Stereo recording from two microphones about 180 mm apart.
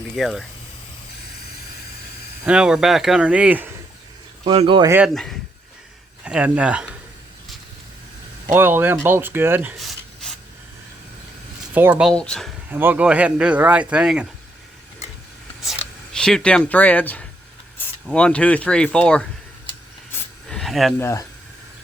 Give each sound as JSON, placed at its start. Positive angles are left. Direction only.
{"t": 0.2, "sound": "speech", "side_deg": 0}
{"t": 2.4, "sound": "speech", "side_deg": -5}
{"t": 4.4, "sound": "speech", "side_deg": -30}
{"t": 4.9, "sound": "speech", "side_deg": -10}
{"t": 5.1, "sound": "speech", "side_deg": 0}
{"t": 8.5, "sound": "speech", "side_deg": -10}
{"t": 11.7, "sound": "speech", "side_deg": -10}
{"t": 12.0, "sound": "speech", "side_deg": 5}
{"t": 12.7, "sound": "speech", "side_deg": -10}
{"t": 16.1, "sound": "speech", "side_deg": 5}
{"t": 20.5, "sound": "a sound", "side_deg": 0}
{"t": 21.0, "sound": "speech", "side_deg": 15}